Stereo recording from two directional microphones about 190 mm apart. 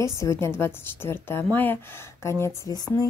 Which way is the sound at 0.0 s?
15° left (ahead or behind).